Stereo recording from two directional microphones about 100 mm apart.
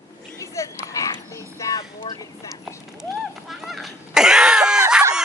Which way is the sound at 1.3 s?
35° left (ahead or behind).